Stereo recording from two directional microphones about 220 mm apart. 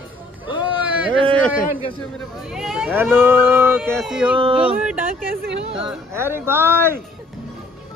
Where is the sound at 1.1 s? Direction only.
25° right (ahead or behind).